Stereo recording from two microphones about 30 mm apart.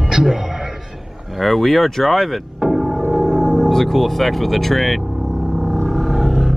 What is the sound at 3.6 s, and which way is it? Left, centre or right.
Speech, centre.